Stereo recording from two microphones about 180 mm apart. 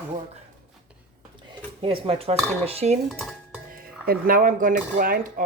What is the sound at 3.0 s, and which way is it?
Speech, centre (ahead or behind).